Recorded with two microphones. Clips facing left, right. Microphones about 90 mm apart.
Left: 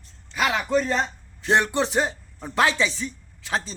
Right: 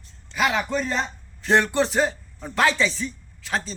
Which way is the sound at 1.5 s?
15° left (ahead or behind).